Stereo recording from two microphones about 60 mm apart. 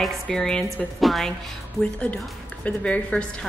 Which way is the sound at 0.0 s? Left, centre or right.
Centre.